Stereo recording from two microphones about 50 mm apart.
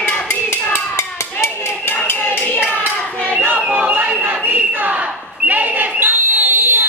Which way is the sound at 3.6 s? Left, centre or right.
Right.